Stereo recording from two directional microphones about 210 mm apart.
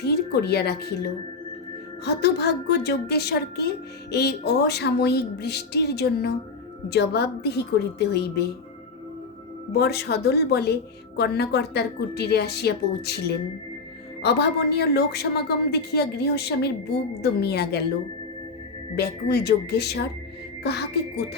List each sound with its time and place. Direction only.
0.0 s a woman's voice: 50° left (ahead or behind)
2.0 s a woman's voice: 50° left (ahead or behind)
9.7 s a woman's voice: 50° left (ahead or behind)
18.9 s a woman's voice: 50° left (ahead or behind)